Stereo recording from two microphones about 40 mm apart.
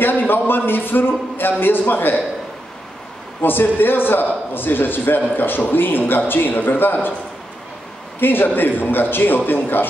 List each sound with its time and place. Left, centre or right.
0.0 s a man's voice: left
3.4 s a man's voice: left
8.2 s a man's voice: left